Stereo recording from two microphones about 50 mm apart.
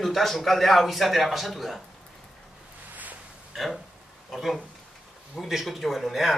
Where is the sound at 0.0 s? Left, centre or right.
Centre.